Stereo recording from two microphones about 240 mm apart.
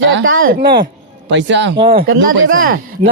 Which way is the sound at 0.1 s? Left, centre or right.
Right.